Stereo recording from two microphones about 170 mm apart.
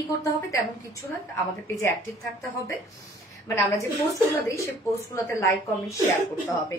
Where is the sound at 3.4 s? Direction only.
15° left (ahead or behind).